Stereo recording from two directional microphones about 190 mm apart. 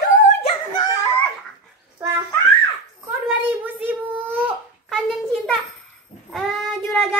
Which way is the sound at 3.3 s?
10° right (ahead or behind).